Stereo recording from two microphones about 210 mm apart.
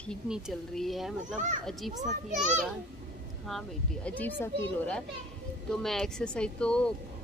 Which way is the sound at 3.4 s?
5° left (ahead or behind).